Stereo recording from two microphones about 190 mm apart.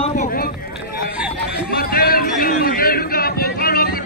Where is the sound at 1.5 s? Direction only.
55° left (ahead or behind).